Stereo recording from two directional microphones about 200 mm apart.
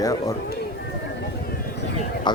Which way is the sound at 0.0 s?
15° left (ahead or behind).